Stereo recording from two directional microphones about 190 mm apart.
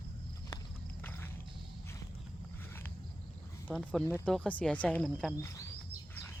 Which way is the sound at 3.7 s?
5° left (ahead or behind).